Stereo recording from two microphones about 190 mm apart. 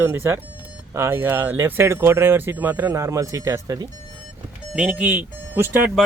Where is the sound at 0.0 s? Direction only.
10° right (ahead or behind).